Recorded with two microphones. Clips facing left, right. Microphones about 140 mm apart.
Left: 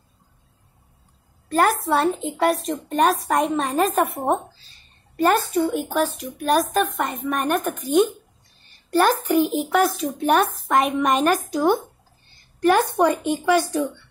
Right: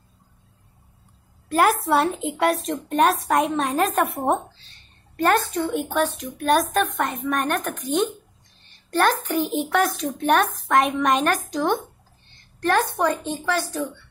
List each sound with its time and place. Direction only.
1.5 s a woman's voice: centre (ahead or behind); by 13.8 s 15° left (ahead or behind)